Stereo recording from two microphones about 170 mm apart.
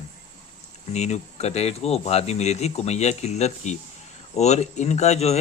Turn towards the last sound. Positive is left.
turn(degrees=40)  # may be behind; listen again after turning